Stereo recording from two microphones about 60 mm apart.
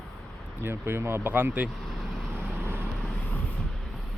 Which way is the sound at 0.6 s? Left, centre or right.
Right.